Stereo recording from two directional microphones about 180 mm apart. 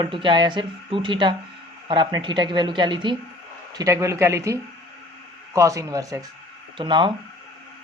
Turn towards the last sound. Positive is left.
turn(degrees=-25)  # may be behind; listen again after turning